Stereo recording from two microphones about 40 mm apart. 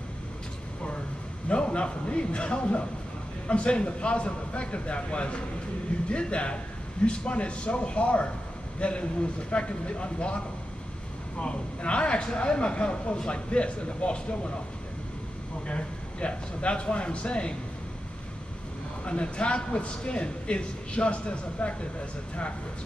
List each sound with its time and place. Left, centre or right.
1.5 s a man's voice: left
15.6 s speech: left
19.0 s speech: left